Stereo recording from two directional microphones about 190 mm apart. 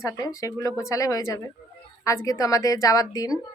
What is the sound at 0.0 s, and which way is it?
A woman's voice, 15° left (ahead or behind).